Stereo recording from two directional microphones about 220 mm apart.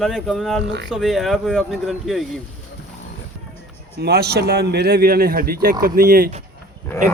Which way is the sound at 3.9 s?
45° right (ahead or behind).